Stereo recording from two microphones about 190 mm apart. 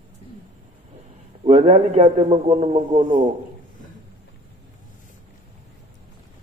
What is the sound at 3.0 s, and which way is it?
Speech, 45° right (ahead or behind).